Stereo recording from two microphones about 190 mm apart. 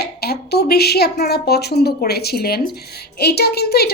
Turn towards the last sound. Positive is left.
turn(degrees=55)  # may be behind; listen again after turning